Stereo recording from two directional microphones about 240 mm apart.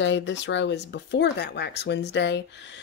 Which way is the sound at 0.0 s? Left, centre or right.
Left.